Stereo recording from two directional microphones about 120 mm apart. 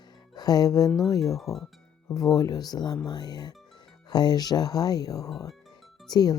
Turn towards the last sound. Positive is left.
turn(degrees=35)  # may be behind; listen again after turning